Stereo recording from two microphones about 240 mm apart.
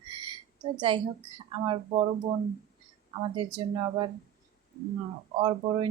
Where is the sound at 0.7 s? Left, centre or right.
Centre.